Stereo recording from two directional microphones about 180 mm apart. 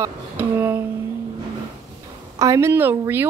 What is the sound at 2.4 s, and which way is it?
Speech, 15° right (ahead or behind).